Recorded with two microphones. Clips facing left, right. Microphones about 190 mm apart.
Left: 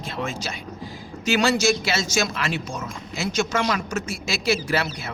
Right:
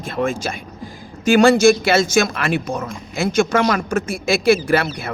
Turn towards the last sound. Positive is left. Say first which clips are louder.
# right 8 dB
turn(degrees=-55)  # may be behind; listen again after turning